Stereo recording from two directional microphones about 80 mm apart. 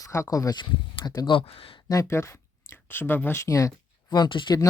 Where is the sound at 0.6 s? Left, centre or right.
Left.